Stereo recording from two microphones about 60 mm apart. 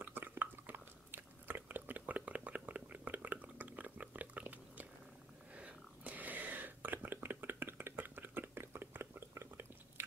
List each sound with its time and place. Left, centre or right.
0.0 s chewing: right
5.5 s whispering: right